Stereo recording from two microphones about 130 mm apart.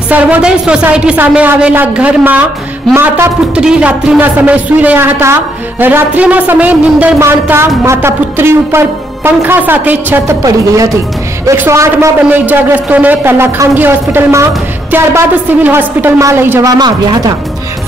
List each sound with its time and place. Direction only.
0.1 s a man's voice: 10° right (ahead or behind)
10.4 s a woman's voice: 25° right (ahead or behind)
16.7 s a woman's voice: 30° right (ahead or behind)